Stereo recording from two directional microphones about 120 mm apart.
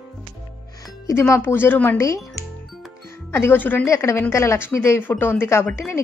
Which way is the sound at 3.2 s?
20° left (ahead or behind).